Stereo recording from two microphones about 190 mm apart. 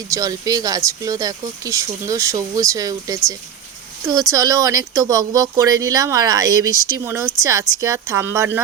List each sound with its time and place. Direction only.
0.1 s speech: 20° right (ahead or behind)
4.3 s speech: 20° right (ahead or behind)